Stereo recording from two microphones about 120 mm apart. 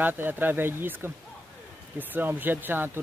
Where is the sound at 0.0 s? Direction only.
15° right (ahead or behind).